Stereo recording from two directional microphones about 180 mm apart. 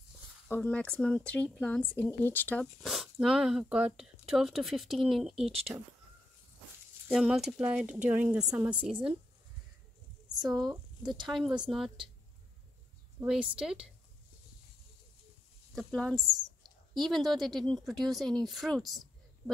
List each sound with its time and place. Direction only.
0.5 s speech: 5° left (ahead or behind)
5.7 s speech: 20° right (ahead or behind)
7.1 s speech: 5° right (ahead or behind)
10.5 s speech: 20° right (ahead or behind)
11.2 s speech: 5° right (ahead or behind)
13.2 s speech: 5° right (ahead or behind)
15.7 s speech: centre (ahead or behind)